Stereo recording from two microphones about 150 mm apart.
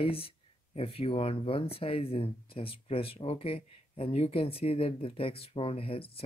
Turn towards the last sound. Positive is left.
turn(degrees=40)  # may be behind; listen again after turning